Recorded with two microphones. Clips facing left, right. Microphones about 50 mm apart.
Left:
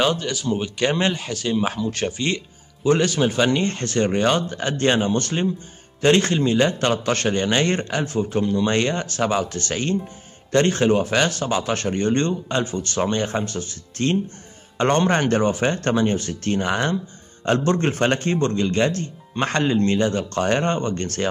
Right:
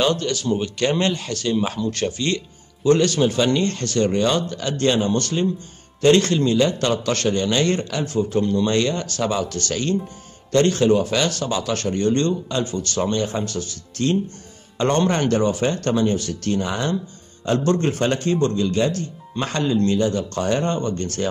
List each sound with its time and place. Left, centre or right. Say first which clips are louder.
0.0 s speech: right 1 dB; centre; by 15.3 s left
15.3 s speech: even; left
16.6 s speech: left 2 dB; left
17.6 s speech: right 1 dB; left